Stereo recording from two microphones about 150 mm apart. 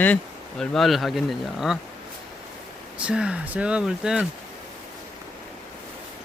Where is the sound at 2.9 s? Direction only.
5° right (ahead or behind).